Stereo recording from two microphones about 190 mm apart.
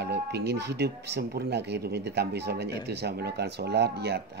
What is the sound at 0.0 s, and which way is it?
Speech, 60° right (ahead or behind).